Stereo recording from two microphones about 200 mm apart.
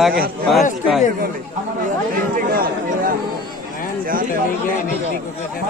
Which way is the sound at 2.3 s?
45° right (ahead or behind).